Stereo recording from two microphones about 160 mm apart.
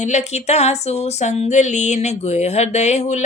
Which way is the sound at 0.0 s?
45° left (ahead or behind).